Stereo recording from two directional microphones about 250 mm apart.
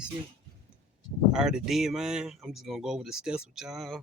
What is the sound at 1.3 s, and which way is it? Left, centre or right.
Speech, centre.